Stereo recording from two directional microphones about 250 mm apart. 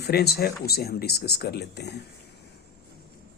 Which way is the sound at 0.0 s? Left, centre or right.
Left.